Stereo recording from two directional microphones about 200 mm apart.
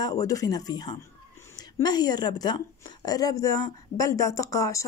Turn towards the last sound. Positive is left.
turn(degrees=15)  # may be behind; listen again after turning